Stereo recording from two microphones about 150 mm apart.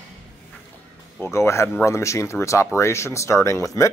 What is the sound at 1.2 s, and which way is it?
Speech, 20° left (ahead or behind).